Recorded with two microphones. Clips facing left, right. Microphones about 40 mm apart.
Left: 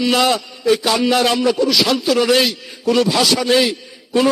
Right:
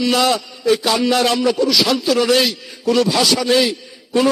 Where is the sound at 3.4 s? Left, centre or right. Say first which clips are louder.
Even; centre.